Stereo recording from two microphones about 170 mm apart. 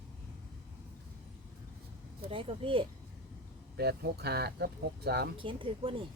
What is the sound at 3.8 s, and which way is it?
Speech, 70° right (ahead or behind).